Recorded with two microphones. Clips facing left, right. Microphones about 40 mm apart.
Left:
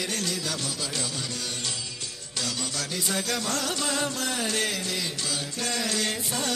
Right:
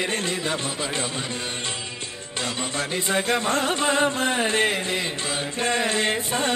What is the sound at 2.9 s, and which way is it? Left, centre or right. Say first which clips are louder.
Music: right 7 dB; right.